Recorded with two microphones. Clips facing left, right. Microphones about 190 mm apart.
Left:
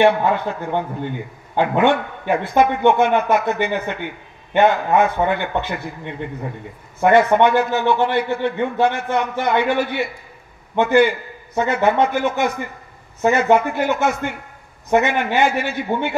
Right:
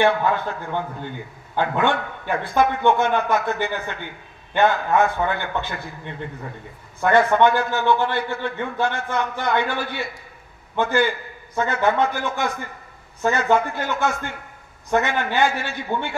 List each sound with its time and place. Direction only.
0.0 s a man's voice: 20° left (ahead or behind)